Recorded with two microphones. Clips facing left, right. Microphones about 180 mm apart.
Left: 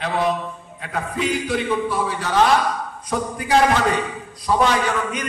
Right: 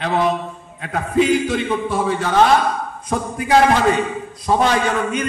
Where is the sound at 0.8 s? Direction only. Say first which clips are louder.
Right 7 dB; 30° right (ahead or behind).